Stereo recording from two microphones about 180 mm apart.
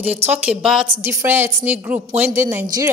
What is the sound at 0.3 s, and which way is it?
Speech, 5° right (ahead or behind).